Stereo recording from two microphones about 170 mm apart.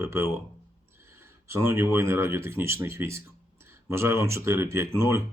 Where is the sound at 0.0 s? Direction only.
15° right (ahead or behind).